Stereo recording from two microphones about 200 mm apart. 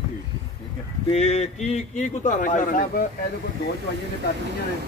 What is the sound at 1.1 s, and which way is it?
A man's voice, 35° left (ahead or behind).